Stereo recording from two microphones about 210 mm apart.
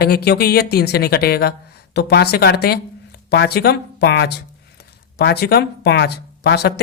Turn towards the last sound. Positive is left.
turn(degrees=50)  # may be behind; listen again after turning